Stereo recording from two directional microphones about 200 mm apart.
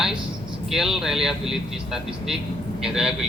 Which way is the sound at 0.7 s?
Centre (ahead or behind).